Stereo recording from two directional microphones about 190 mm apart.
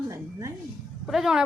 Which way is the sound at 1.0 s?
Centre (ahead or behind).